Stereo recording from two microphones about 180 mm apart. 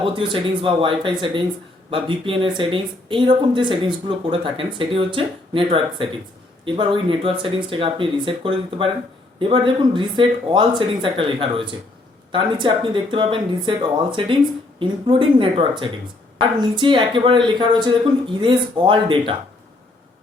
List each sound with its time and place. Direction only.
0.0 s speech: 30° right (ahead or behind)